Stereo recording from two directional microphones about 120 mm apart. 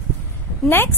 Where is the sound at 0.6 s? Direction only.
20° left (ahead or behind).